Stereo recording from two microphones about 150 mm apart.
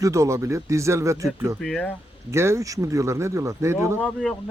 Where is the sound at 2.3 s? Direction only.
20° right (ahead or behind).